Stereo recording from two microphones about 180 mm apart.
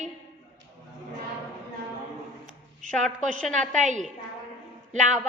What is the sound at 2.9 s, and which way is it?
Speech, 5° left (ahead or behind).